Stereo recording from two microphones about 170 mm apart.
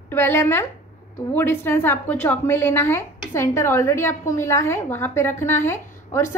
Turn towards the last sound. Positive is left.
turn(degrees=15)  # may be behind; listen again after turning